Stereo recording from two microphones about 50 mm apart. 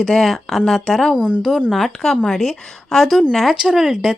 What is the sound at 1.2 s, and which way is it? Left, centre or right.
Speech, right.